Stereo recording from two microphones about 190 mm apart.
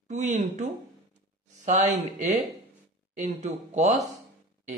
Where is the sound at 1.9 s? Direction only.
40° right (ahead or behind).